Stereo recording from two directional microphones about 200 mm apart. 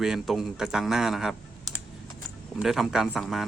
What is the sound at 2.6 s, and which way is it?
Speech, centre (ahead or behind).